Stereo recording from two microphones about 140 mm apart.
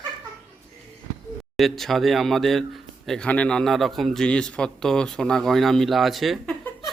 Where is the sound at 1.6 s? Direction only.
Centre (ahead or behind).